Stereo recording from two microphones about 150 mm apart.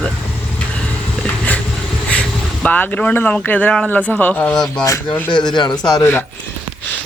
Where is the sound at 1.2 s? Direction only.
10° left (ahead or behind).